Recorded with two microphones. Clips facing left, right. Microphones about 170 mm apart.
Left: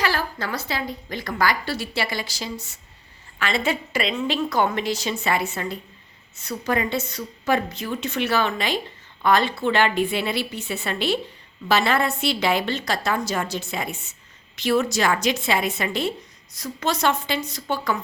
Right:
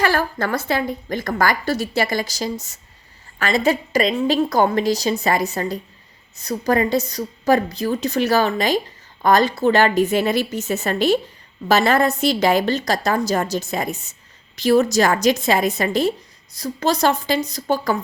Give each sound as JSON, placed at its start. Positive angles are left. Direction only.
{"t": 0.0, "sound": "a woman's voice", "side_deg": -50}